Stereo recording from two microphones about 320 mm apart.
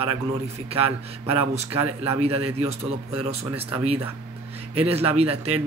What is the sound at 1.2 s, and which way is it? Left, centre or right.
Speech, centre.